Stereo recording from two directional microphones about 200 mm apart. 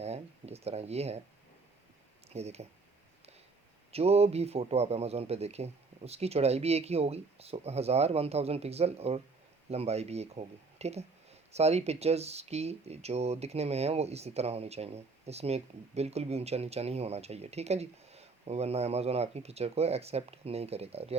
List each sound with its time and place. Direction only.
0.0 s a sound: 30° right (ahead or behind)
2.3 s speech: 30° right (ahead or behind)
3.9 s speech: 30° right (ahead or behind)